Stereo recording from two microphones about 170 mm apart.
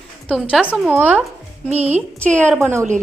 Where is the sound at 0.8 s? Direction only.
10° right (ahead or behind).